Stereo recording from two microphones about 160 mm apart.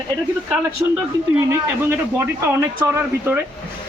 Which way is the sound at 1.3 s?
15° right (ahead or behind).